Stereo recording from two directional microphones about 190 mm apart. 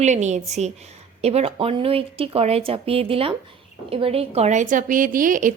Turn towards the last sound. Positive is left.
turn(degrees=-45)  # may be behind; listen again after turning